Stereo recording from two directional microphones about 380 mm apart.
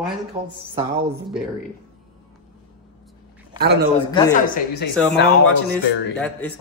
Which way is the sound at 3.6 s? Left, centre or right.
Right.